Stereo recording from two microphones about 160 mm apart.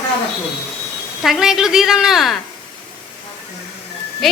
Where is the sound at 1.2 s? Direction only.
5° right (ahead or behind).